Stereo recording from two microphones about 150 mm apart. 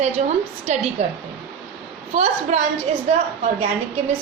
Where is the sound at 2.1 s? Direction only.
50° right (ahead or behind).